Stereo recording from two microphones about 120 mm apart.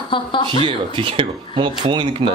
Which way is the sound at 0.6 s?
45° right (ahead or behind).